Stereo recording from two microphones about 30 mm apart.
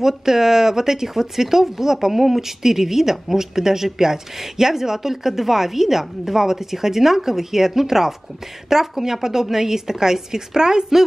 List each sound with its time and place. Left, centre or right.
0.0 s speech: centre